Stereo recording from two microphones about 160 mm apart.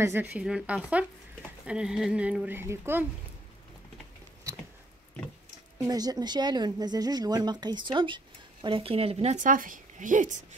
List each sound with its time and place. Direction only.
0.0 s speech: 10° right (ahead or behind)
5.8 s speech: 25° right (ahead or behind); by 10.4 s 55° right (ahead or behind)